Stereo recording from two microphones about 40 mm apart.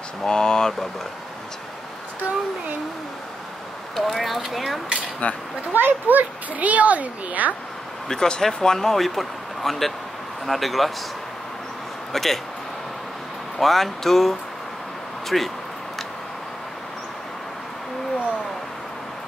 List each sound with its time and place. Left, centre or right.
0.2 s speech: centre
3.9 s speech: centre
5.2 s a child's voice: left
5.7 s a child's voice: right
8.1 s speech: centre
12.1 s speech: centre
13.6 s speech: centre